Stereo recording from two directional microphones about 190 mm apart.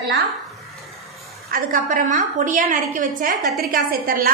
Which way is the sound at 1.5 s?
45° right (ahead or behind).